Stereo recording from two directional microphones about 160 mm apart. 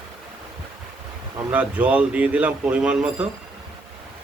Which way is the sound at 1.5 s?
10° right (ahead or behind).